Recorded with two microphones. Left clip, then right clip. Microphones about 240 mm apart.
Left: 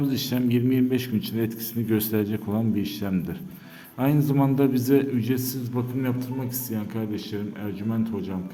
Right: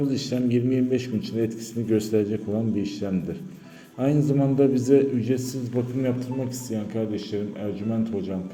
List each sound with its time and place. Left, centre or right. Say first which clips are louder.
0.0 s a man's voice: even; left